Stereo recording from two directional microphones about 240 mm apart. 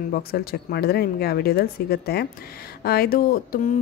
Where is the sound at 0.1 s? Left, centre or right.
Left.